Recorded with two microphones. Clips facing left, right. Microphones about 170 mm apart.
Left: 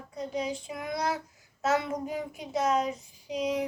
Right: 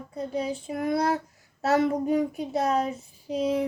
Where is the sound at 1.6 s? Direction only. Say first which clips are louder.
Right 5 dB; 35° right (ahead or behind).